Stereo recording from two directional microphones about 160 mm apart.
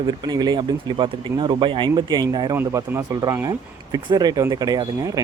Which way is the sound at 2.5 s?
15° right (ahead or behind).